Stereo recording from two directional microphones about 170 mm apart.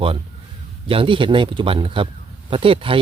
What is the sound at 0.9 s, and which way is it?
A man's voice, 30° right (ahead or behind).